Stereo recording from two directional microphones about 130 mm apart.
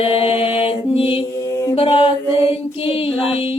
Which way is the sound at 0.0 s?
45° left (ahead or behind).